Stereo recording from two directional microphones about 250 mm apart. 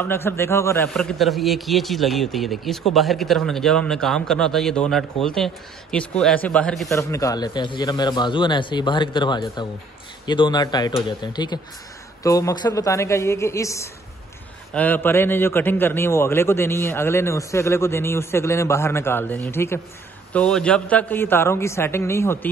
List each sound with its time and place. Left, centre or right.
0.0 s a man's voice: centre